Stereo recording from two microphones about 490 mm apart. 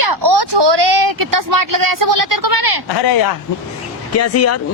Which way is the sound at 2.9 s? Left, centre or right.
Left.